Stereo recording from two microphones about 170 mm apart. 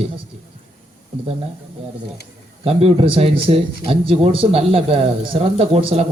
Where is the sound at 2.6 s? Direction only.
35° right (ahead or behind).